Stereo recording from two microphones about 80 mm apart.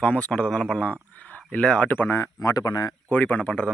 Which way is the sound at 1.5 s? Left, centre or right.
Centre.